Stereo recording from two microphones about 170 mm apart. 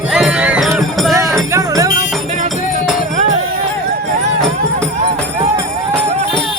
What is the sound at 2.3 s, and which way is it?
Music, 45° right (ahead or behind).